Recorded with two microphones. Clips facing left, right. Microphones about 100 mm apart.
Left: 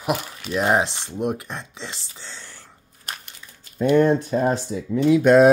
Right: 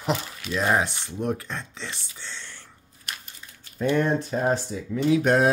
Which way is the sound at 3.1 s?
35° left (ahead or behind).